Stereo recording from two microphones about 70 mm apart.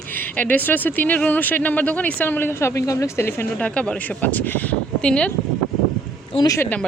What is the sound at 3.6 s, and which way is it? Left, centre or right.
Speech, centre.